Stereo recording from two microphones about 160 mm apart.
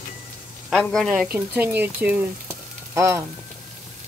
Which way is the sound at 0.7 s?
5° left (ahead or behind).